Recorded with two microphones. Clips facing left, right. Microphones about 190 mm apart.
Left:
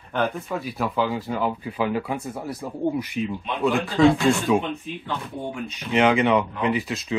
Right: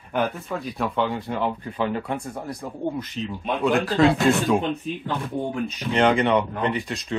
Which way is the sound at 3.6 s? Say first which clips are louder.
Left 1 dB; centre (ahead or behind).